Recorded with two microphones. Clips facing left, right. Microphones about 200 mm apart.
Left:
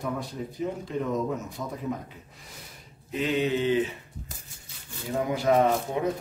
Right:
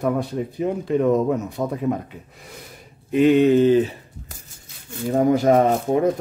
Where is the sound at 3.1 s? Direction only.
55° right (ahead or behind); by 3.9 s 40° right (ahead or behind).